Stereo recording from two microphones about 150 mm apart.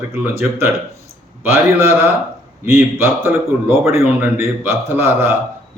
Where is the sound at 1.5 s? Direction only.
15° right (ahead or behind).